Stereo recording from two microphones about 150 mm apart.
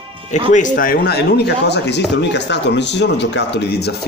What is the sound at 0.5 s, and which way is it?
Speech, 55° left (ahead or behind).